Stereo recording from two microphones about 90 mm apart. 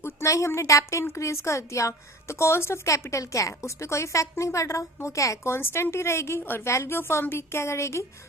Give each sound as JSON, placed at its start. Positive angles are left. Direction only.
{"t": 0.0, "sound": "a woman's voice", "side_deg": 30}